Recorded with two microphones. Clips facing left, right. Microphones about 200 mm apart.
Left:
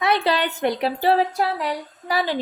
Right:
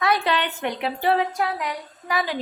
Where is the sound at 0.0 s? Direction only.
25° left (ahead or behind).